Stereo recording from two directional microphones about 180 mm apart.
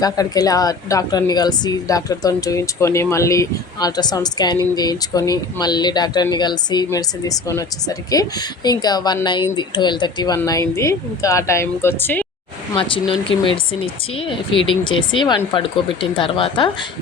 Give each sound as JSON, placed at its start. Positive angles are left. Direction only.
{"t": 0.0, "sound": "a woman's voice", "side_deg": 20}
{"t": 12.7, "sound": "a woman's voice", "side_deg": 30}